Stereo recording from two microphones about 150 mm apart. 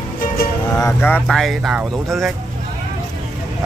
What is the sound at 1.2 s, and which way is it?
Speech, centre (ahead or behind).